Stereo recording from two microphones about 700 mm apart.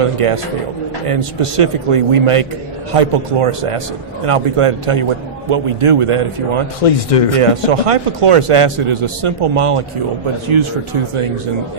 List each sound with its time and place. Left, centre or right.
0.0 s a man's voice: right
6.8 s speech: left
7.3 s a man's voice: right